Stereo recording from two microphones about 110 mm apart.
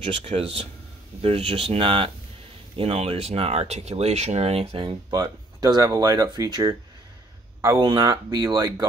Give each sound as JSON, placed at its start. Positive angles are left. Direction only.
{"t": 0.2, "sound": "speech", "side_deg": -70}
{"t": 5.2, "sound": "speech", "side_deg": -35}